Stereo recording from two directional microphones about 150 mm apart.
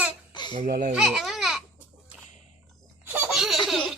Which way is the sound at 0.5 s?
60° right (ahead or behind).